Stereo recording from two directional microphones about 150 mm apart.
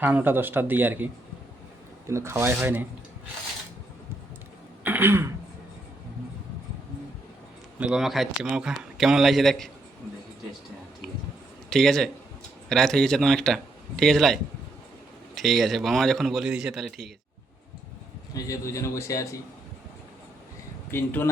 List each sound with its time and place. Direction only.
0.0 s a man's voice: 10° right (ahead or behind)
4.8 s throat clearing: 10° right (ahead or behind)
7.8 s a man's voice: 5° right (ahead or behind)
11.7 s a man's voice: 5° left (ahead or behind)
15.4 s a man's voice: centre (ahead or behind)
18.3 s a man's voice: 20° left (ahead or behind)
20.9 s speech: 15° left (ahead or behind)